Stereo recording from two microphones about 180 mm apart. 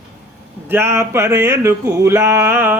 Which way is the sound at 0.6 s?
15° right (ahead or behind).